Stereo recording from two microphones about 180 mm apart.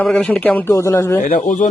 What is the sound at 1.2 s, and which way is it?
Speech, 45° left (ahead or behind).